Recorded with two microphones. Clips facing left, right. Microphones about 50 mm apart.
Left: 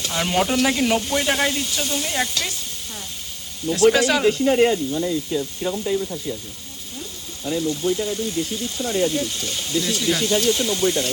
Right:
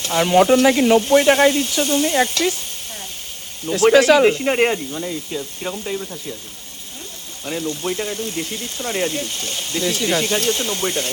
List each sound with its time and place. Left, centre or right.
0.0 s speech: right
3.7 s speech: right
4.9 s speech: right
7.8 s speech: right